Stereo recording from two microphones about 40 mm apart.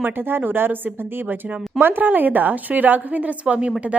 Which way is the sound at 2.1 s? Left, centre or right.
Right.